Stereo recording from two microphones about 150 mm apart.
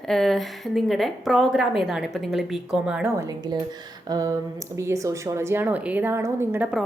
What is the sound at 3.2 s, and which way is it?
A woman's voice, 25° right (ahead or behind).